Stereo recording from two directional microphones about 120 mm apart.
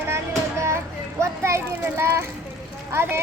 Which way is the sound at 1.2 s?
25° right (ahead or behind).